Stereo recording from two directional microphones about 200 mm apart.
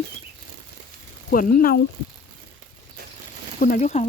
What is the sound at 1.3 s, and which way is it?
Speech, 45° left (ahead or behind).